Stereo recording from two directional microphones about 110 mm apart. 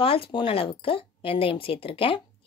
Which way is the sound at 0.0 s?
55° left (ahead or behind).